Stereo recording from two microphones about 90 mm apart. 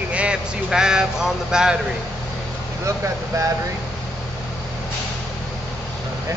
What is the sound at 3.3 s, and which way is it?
Speech, 35° right (ahead or behind).